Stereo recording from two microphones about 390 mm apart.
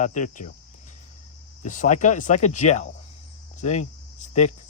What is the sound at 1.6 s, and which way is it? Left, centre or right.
Speech, centre.